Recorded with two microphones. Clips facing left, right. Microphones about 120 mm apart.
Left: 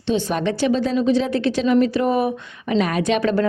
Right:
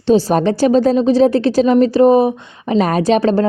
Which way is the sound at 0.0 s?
40° right (ahead or behind).